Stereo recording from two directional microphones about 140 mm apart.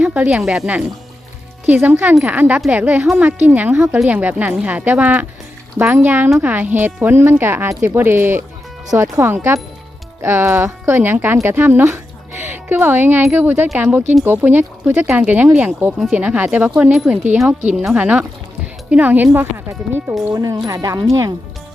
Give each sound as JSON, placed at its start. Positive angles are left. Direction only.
{"t": 0.0, "sound": "speech", "side_deg": -10}